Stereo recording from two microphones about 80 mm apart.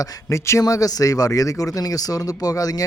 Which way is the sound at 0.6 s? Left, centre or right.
Left.